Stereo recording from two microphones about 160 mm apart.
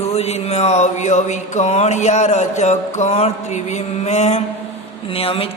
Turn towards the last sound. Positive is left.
turn(degrees=35)  # may be behind; listen again after turning